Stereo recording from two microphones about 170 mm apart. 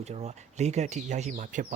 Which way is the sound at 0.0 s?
40° right (ahead or behind).